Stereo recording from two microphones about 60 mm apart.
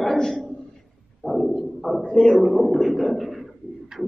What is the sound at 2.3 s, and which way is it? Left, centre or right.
Speech, centre.